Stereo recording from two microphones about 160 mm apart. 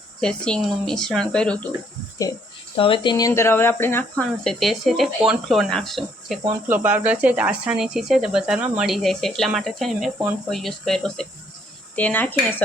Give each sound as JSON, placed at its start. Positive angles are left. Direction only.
{"t": 0.2, "sound": "speech", "side_deg": 5}
{"t": 2.7, "sound": "speech", "side_deg": 35}
{"t": 4.4, "sound": "speech", "side_deg": 0}